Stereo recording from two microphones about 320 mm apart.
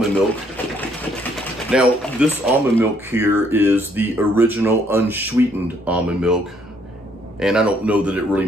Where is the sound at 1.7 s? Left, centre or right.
Centre.